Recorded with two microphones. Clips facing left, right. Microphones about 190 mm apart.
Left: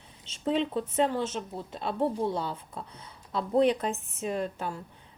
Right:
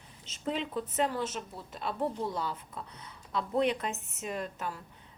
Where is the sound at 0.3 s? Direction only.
30° left (ahead or behind).